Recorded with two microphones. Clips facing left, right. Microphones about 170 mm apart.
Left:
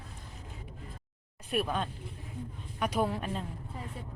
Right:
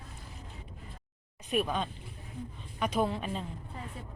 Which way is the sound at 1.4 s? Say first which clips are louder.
Right 1 dB; 5° left (ahead or behind).